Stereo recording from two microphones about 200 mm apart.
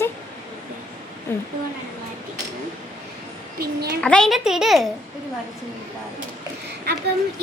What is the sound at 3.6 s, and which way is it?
Speech, 50° right (ahead or behind).